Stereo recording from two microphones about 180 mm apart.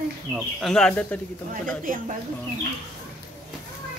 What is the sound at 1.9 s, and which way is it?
Speech, 50° right (ahead or behind).